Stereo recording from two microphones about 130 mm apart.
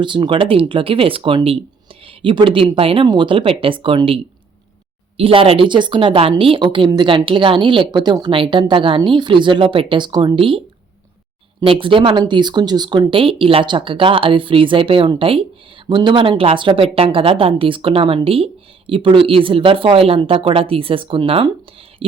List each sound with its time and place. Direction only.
0.0 s speech: 35° right (ahead or behind)
11.6 s speech: 40° right (ahead or behind)